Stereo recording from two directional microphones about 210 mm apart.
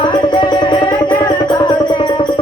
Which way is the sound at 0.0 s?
20° left (ahead or behind).